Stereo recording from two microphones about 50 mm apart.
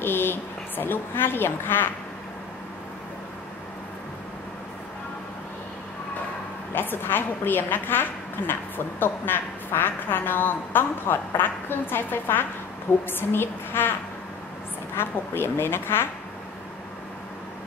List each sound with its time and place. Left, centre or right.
0.0 s a woman's voice: left
6.7 s a woman's voice: left
15.0 s a woman's voice: left